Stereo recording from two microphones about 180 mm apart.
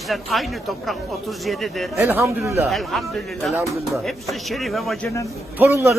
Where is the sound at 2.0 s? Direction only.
10° right (ahead or behind).